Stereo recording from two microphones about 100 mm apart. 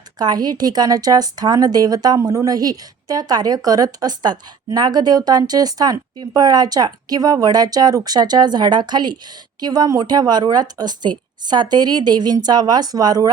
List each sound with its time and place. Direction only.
0.2 s a woman's voice: 40° right (ahead or behind)